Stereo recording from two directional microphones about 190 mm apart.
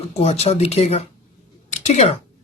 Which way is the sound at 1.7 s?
35° left (ahead or behind).